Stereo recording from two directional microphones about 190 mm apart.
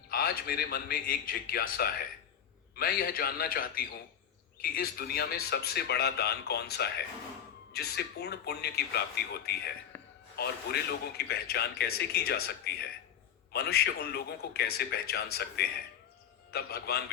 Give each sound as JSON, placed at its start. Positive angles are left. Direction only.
{"t": 0.1, "sound": "a man's voice", "side_deg": 50}
{"t": 9.9, "sound": "a sound", "side_deg": 10}
{"t": 10.3, "sound": "a man's voice", "side_deg": 55}